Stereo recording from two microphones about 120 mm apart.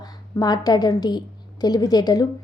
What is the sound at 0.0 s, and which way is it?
A woman's voice, 35° left (ahead or behind).